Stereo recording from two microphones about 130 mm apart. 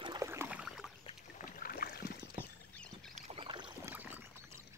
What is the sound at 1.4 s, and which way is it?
Rowboat, 90° left.